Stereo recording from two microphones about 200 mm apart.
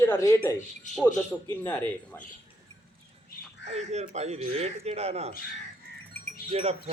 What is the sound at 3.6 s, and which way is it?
Speech, 35° right (ahead or behind).